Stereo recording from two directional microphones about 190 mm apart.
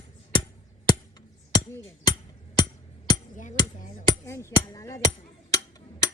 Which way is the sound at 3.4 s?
40° left (ahead or behind).